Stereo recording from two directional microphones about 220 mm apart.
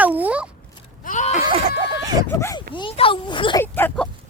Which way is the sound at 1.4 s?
25° right (ahead or behind).